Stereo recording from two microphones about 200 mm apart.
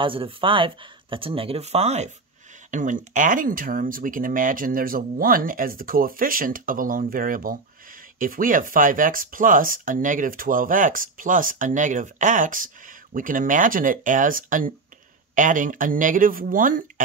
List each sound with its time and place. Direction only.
0.0 s speech: 25° right (ahead or behind); by 17.0 s 40° right (ahead or behind)